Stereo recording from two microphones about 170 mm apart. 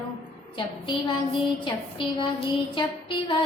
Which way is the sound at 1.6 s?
30° left (ahead or behind).